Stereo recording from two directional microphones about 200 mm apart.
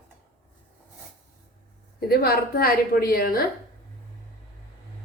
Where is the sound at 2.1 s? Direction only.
50° left (ahead or behind).